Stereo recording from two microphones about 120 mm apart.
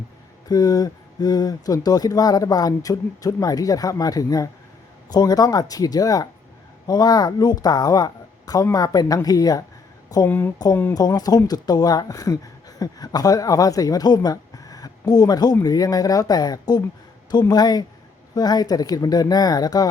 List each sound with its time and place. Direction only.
0.4 s speech: 30° left (ahead or behind)
10.2 s speech: 15° left (ahead or behind)
10.9 s speech: 30° left (ahead or behind)